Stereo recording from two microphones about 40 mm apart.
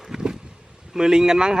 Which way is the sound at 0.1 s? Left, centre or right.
Centre.